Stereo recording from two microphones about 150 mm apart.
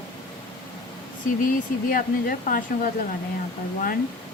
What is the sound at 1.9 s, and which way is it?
Speech, 70° left (ahead or behind).